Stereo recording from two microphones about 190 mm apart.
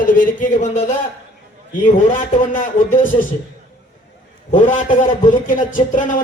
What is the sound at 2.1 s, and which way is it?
Speech, 45° left (ahead or behind).